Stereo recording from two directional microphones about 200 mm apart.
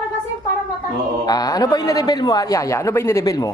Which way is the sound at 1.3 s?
20° left (ahead or behind).